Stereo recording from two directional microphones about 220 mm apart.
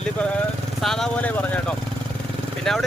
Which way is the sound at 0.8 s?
Centre (ahead or behind).